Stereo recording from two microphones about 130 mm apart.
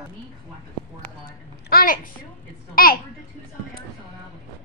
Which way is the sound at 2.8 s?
90° left.